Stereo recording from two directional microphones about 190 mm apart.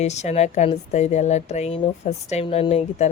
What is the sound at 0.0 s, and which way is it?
Speech, 35° left (ahead or behind).